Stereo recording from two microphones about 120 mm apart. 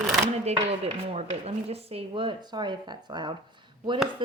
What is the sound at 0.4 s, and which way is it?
A woman's voice, 60° right (ahead or behind).